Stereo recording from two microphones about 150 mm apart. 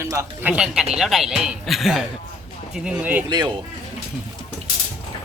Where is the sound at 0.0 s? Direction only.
20° right (ahead or behind).